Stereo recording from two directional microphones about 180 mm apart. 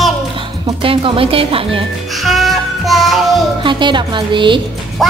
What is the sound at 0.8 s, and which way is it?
Speech, 30° right (ahead or behind).